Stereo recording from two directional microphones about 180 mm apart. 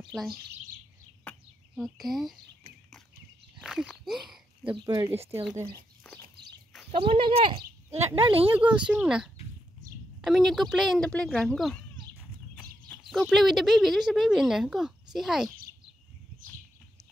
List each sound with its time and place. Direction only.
1.8 s speech: centre (ahead or behind)
3.5 s speech: 5° right (ahead or behind)
4.8 s speech: 15° right (ahead or behind)
6.0 s walk: centre (ahead or behind)
6.9 s speech: 30° right (ahead or behind)
8.5 s speech: 5° right (ahead or behind)
12.8 s speech: 5° left (ahead or behind)